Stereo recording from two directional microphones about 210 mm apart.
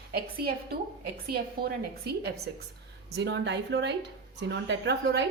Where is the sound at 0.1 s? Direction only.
50° right (ahead or behind).